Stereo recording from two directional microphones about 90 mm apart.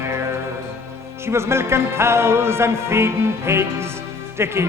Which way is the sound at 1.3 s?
30° right (ahead or behind).